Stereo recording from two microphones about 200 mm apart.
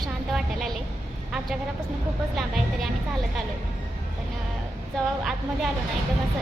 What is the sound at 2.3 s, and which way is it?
Speech, centre (ahead or behind).